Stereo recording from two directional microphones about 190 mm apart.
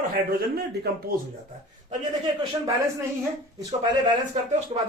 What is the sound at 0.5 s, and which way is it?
Speech, 55° right (ahead or behind).